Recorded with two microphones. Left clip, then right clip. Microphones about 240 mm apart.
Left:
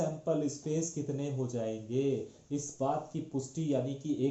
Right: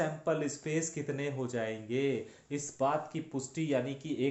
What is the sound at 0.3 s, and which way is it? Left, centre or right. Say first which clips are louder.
Speech: even; right.